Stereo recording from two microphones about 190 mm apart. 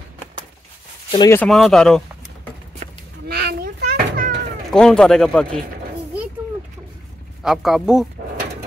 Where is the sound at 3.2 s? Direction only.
55° right (ahead or behind).